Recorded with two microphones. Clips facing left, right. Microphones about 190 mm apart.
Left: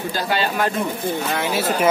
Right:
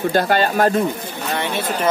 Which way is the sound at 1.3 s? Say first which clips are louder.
Right 2 dB; 5° left (ahead or behind).